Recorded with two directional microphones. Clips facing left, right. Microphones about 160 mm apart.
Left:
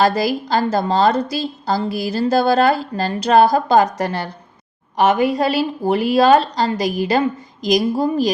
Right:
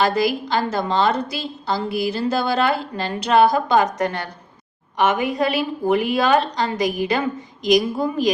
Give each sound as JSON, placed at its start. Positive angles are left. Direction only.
{"t": 0.0, "sound": "a woman's voice", "side_deg": 40}